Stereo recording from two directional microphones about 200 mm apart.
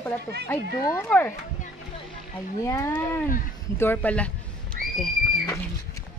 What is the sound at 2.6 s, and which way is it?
Speech, 15° left (ahead or behind).